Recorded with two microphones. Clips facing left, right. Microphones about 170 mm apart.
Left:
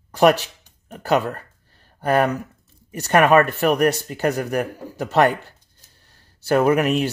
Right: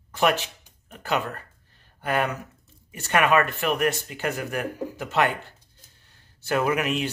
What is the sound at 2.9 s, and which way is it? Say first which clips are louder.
Speech: left 6 dB; 40° left (ahead or behind).